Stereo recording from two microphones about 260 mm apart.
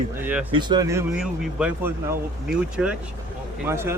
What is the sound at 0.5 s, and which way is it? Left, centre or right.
Speech, centre.